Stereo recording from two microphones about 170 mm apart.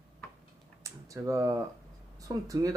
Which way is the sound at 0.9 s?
20° right (ahead or behind).